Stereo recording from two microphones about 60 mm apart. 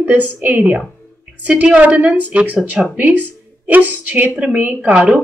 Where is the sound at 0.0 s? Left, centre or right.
Right.